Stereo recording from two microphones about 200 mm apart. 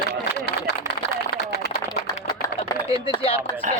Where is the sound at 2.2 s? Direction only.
25° left (ahead or behind).